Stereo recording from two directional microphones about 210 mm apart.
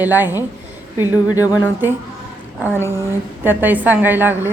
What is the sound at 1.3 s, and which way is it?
Speech, 15° left (ahead or behind).